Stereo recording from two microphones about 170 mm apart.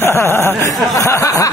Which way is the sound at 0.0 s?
15° left (ahead or behind).